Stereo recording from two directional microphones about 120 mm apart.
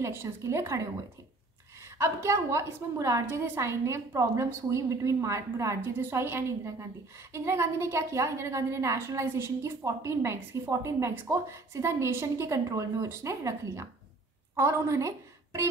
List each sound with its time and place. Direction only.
0.0 s a woman's voice: 20° right (ahead or behind)
2.0 s a woman's voice: 20° right (ahead or behind)